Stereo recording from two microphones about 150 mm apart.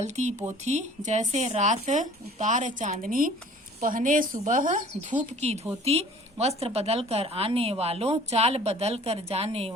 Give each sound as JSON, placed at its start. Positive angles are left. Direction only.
{"t": 0.0, "sound": "a woman's voice", "side_deg": -50}